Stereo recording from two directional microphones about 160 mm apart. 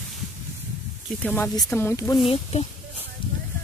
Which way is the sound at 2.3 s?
40° left (ahead or behind).